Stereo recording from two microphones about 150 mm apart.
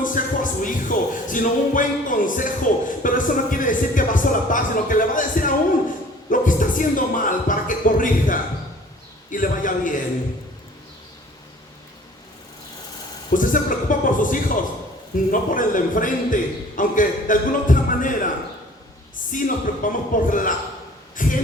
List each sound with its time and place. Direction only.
0.0 s speech: 60° left (ahead or behind)
13.3 s a sound: 65° left (ahead or behind)
15.3 s a man's voice: 65° left (ahead or behind)
19.3 s speech: 65° left (ahead or behind)